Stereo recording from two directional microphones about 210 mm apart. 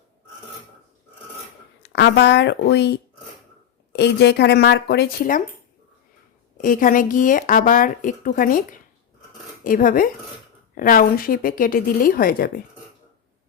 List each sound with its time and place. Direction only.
1.8 s a woman's voice: 55° left (ahead or behind)
6.6 s speech: 40° left (ahead or behind)
9.6 s a woman's voice: 40° left (ahead or behind)